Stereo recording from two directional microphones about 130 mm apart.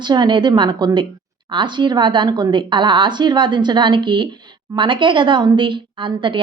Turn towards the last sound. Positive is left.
turn(degrees=-40)  # may be behind; listen again after turning